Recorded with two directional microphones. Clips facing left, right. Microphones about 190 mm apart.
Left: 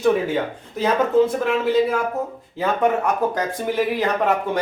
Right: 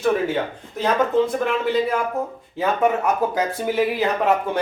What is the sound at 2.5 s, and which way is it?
Speech, centre (ahead or behind).